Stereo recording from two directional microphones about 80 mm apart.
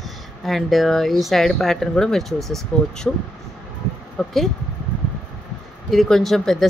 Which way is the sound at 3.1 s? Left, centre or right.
Centre.